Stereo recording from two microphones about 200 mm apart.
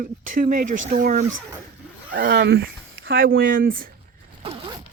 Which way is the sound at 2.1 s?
50° right (ahead or behind).